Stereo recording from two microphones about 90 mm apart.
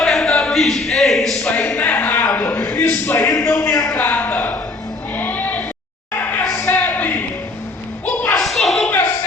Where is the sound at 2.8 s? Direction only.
30° left (ahead or behind).